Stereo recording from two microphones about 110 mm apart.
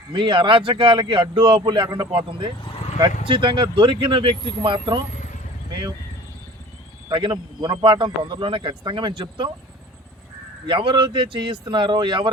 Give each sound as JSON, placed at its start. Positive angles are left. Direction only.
{"t": 0.1, "sound": "a man's voice", "side_deg": -45}
{"t": 2.6, "sound": "vehicle", "side_deg": 50}
{"t": 3.2, "sound": "a man's voice", "side_deg": -50}
{"t": 7.1, "sound": "a man's voice", "side_deg": -45}
{"t": 10.7, "sound": "a man's voice", "side_deg": -50}